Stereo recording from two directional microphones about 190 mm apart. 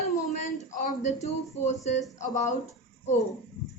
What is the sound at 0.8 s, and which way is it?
Speech, 40° left (ahead or behind).